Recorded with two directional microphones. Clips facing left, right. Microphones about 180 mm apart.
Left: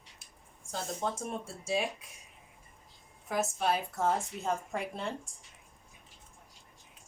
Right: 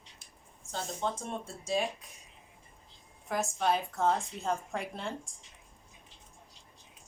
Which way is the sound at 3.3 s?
5° left (ahead or behind).